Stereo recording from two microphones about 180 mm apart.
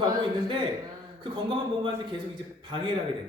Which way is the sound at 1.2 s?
25° right (ahead or behind).